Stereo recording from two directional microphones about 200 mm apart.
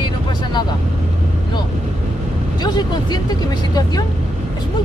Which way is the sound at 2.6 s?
20° left (ahead or behind).